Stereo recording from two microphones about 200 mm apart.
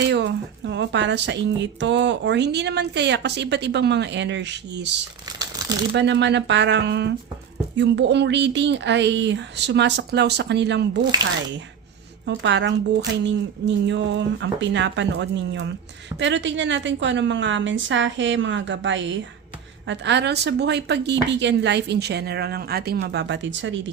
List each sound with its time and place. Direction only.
0.1 s speech: 60° right (ahead or behind)
5.6 s shuffling cards: 20° right (ahead or behind)
5.9 s speech: 60° right (ahead or behind)
12.2 s speech: 60° right (ahead or behind)